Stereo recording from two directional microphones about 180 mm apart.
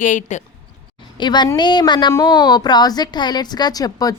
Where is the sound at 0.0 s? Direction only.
45° left (ahead or behind).